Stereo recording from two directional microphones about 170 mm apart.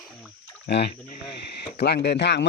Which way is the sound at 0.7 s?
75° left (ahead or behind).